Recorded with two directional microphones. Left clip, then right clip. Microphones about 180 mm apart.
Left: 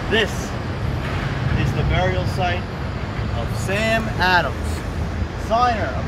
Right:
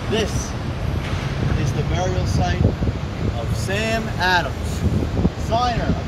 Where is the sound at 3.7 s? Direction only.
30° left (ahead or behind).